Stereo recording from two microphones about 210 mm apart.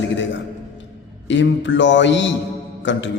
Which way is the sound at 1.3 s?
60° left (ahead or behind).